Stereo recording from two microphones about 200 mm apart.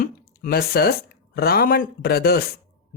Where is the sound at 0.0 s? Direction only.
50° left (ahead or behind).